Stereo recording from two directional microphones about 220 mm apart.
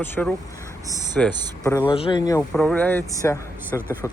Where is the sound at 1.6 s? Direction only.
15° left (ahead or behind).